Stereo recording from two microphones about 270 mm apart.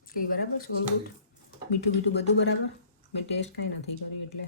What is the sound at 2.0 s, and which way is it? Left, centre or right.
Speech, left.